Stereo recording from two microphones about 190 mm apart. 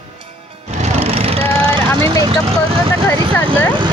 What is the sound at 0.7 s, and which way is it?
Vehicle, 35° right (ahead or behind).